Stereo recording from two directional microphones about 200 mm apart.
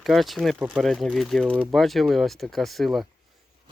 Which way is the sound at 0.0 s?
Centre (ahead or behind).